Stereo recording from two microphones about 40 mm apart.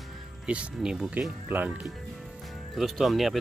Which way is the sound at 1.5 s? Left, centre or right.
Right.